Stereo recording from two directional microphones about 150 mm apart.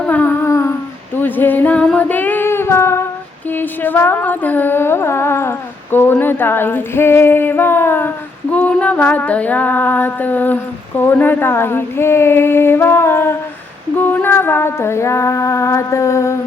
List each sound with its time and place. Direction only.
0.0 s a sound: 10° left (ahead or behind)
1.1 s female singing: 15° left (ahead or behind)
14.0 s music: 10° left (ahead or behind)